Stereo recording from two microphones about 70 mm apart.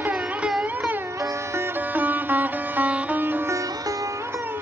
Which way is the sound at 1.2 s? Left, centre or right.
Right.